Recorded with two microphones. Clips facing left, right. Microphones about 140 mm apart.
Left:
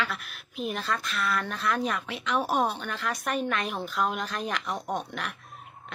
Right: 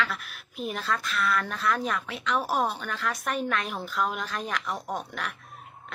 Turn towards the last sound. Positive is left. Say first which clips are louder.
# left 1 dB
turn(degrees=-5)  # may be behind; listen again after turning